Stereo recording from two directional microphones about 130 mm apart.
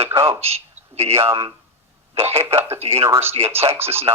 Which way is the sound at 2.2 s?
50° right (ahead or behind).